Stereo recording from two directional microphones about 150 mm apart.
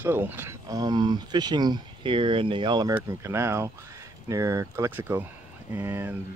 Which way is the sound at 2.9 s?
15° right (ahead or behind).